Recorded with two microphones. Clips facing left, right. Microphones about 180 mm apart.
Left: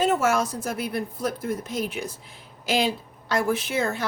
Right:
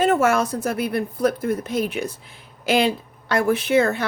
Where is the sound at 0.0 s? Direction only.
60° right (ahead or behind).